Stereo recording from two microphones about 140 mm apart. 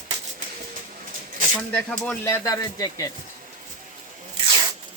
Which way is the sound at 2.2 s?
20° left (ahead or behind).